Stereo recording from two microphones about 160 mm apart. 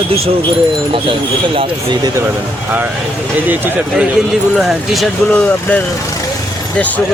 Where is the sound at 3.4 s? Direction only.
10° right (ahead or behind).